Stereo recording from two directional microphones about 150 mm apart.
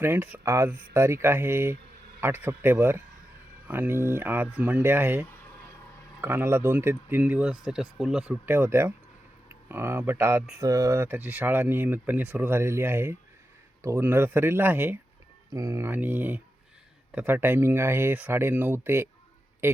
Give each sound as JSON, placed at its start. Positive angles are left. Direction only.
{"t": 0.0, "sound": "speech", "side_deg": -15}
{"t": 6.2, "sound": "speech", "side_deg": -15}
{"t": 8.4, "sound": "speech", "side_deg": -15}